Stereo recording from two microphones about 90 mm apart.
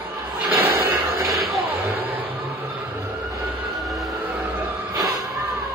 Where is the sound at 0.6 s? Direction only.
35° right (ahead or behind).